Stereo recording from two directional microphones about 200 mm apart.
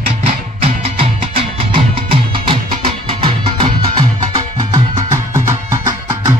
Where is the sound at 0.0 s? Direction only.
30° right (ahead or behind).